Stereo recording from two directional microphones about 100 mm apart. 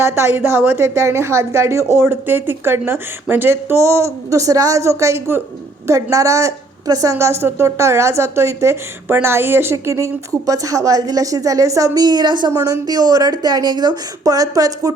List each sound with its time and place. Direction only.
0.0 s a woman's voice: 25° right (ahead or behind); by 12.5 s 45° right (ahead or behind)
12.5 s a woman's voice: 35° right (ahead or behind)